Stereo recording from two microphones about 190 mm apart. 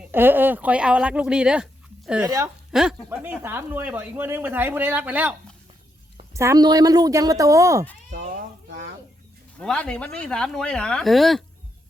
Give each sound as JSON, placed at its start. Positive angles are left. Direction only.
{"t": 0.1, "sound": "speech", "side_deg": -10}
{"t": 9.6, "sound": "speech", "side_deg": 5}